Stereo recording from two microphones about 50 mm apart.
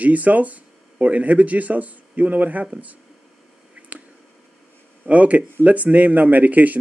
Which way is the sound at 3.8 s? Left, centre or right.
Right.